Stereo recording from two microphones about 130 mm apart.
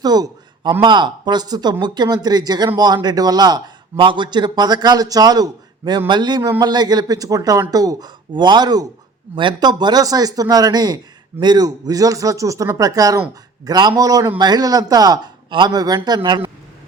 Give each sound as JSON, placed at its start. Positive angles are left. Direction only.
{"t": 0.0, "sound": "a man's voice", "side_deg": -30}